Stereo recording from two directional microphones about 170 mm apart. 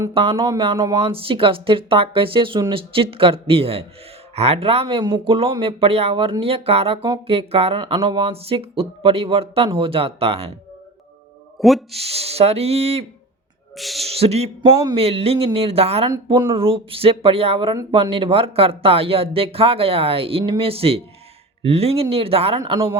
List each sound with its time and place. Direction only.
0.1 s speech: 30° right (ahead or behind)
0.3 s speech: 20° right (ahead or behind)
1.0 s speech: 30° right (ahead or behind)
11.6 s speech: centre (ahead or behind)
11.9 s speech: 35° right (ahead or behind)
13.7 s speech: centre (ahead or behind)
14.1 s speech: 35° right (ahead or behind)
16.0 s speech: 20° right (ahead or behind)
16.6 s speech: 35° right (ahead or behind)